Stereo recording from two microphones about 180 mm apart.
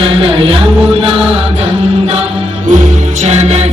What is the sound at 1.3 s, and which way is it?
Chant, 35° right (ahead or behind).